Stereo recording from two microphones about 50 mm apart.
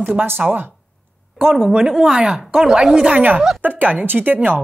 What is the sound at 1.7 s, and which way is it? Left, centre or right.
Speech, centre.